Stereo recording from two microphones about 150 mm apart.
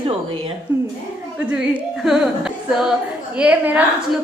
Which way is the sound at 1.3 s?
5° right (ahead or behind).